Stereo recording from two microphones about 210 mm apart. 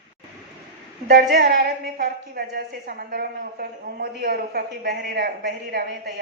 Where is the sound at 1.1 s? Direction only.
45° right (ahead or behind).